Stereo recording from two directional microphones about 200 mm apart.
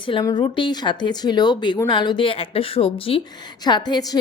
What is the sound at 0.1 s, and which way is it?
A woman's voice, 20° left (ahead or behind).